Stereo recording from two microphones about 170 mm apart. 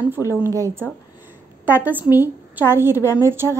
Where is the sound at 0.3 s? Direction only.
15° right (ahead or behind).